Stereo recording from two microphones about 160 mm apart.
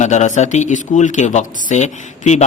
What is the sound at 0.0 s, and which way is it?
Speech, 45° left (ahead or behind).